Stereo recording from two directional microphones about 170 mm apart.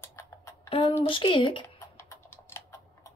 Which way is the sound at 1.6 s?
15° left (ahead or behind).